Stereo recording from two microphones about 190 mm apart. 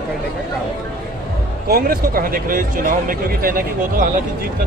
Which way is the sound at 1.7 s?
50° right (ahead or behind).